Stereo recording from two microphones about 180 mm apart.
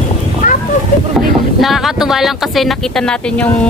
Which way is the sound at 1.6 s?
Centre (ahead or behind).